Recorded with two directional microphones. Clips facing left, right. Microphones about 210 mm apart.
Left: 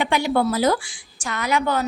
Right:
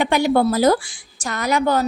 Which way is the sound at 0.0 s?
40° right (ahead or behind).